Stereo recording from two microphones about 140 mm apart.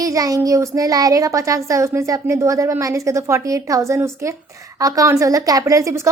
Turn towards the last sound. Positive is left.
turn(degrees=-20)  # may be behind; listen again after turning